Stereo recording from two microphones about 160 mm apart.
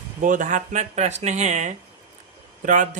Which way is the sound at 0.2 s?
55° right (ahead or behind).